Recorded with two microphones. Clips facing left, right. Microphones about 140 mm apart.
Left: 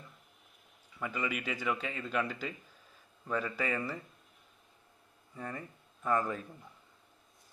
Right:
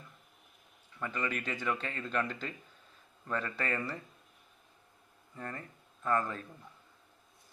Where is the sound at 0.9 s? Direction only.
10° left (ahead or behind).